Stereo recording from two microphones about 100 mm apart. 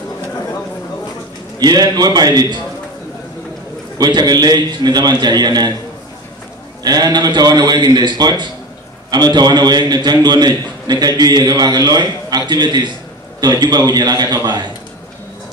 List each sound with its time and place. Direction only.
1.6 s a man's voice: 40° right (ahead or behind)
4.0 s a man's voice: 45° right (ahead or behind)
6.8 s a man's voice: 45° right (ahead or behind)